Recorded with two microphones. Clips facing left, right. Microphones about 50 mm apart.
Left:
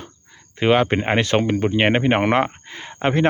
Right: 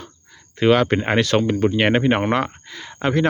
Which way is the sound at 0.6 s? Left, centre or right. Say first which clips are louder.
Right 1 dB; left.